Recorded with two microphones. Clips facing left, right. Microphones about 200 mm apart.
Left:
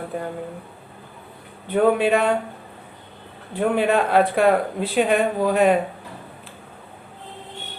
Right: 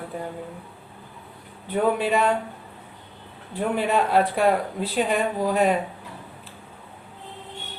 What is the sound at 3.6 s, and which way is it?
A woman's voice, 60° left (ahead or behind).